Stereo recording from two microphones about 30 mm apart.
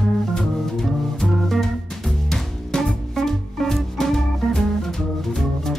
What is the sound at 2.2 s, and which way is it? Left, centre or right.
Music, centre.